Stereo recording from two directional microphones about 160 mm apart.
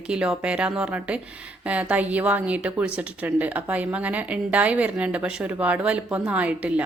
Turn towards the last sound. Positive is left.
turn(degrees=-10)  # may be behind; listen again after turning